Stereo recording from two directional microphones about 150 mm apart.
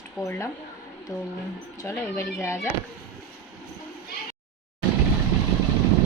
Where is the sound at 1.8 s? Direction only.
20° left (ahead or behind).